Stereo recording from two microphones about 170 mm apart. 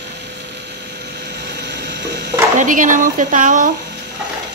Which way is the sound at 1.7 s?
90° right.